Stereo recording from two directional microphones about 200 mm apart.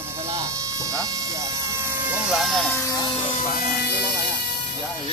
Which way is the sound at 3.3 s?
45° left (ahead or behind).